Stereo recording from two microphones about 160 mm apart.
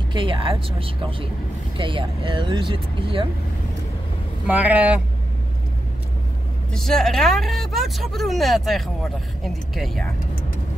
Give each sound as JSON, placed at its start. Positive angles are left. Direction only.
{"t": 0.1, "sound": "speech", "side_deg": -30}
{"t": 4.5, "sound": "speech", "side_deg": -10}
{"t": 6.7, "sound": "speech", "side_deg": 5}